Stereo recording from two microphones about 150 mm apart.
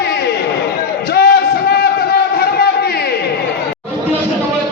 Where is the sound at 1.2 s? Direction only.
90° left.